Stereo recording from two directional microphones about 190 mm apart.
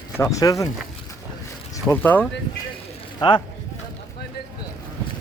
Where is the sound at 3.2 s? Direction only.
25° left (ahead or behind).